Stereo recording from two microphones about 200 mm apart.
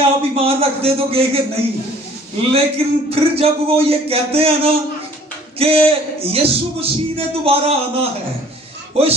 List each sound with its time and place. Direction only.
0.0 s speech: 30° right (ahead or behind)
2.5 s speech: 30° right (ahead or behind)